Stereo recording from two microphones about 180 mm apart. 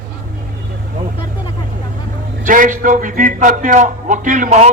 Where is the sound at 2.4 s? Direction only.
45° right (ahead or behind).